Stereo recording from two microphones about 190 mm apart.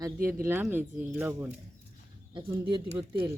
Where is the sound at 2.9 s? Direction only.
10° right (ahead or behind).